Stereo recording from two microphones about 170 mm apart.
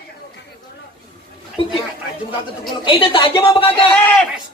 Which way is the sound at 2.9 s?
30° left (ahead or behind).